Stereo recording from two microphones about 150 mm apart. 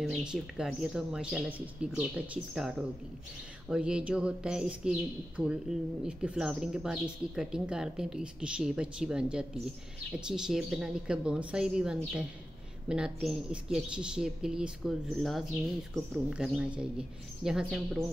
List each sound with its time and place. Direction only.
0.0 s speech: 5° right (ahead or behind)